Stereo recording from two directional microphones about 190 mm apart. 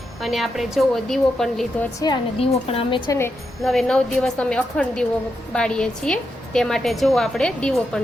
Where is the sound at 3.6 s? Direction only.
Centre (ahead or behind).